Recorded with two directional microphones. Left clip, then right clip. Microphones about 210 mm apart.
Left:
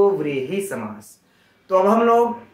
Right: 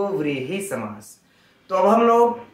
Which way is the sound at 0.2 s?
10° left (ahead or behind).